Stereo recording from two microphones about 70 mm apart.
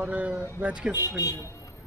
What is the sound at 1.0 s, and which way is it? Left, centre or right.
Speech, left.